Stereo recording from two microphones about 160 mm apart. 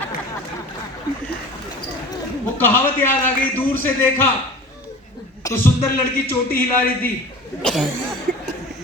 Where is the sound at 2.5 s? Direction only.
10° left (ahead or behind).